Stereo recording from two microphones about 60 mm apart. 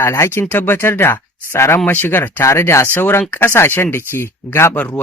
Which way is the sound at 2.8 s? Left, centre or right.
Left.